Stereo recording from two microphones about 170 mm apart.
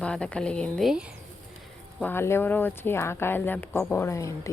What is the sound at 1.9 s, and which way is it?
Speech, 10° left (ahead or behind).